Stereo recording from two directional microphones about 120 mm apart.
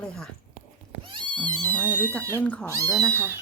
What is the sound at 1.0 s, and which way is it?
Goat, 45° right (ahead or behind).